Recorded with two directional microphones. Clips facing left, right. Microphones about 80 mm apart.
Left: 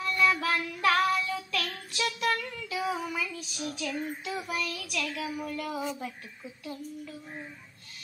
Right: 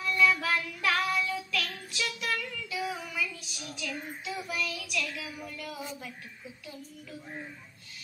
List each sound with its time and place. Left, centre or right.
0.0 s child singing: left